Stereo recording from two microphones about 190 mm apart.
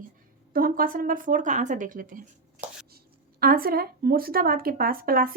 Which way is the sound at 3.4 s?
50° right (ahead or behind).